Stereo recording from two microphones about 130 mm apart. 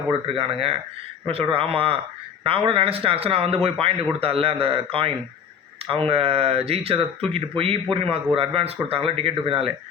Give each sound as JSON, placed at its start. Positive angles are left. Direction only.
{"t": 0.1, "sound": "a man's voice", "side_deg": -40}